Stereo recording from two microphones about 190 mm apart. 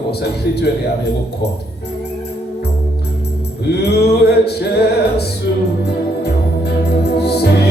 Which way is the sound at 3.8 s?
60° left (ahead or behind).